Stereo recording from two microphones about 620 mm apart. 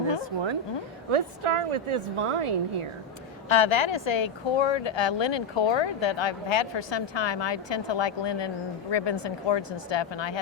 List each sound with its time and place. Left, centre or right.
1.1 s a woman's voice: right
3.5 s speech: left